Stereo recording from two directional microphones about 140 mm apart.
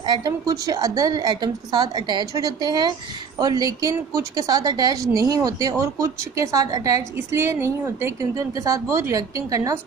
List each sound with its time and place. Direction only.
0.0 s a woman's voice: 30° right (ahead or behind)